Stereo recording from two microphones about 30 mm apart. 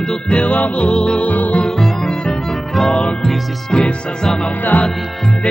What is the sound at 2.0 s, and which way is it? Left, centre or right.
Music, left.